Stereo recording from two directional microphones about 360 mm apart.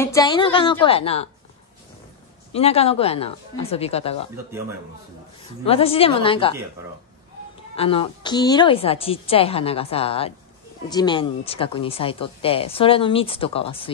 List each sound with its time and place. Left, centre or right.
0.0 s speech: centre
2.5 s speech: centre
5.7 s speech: centre
7.7 s speech: centre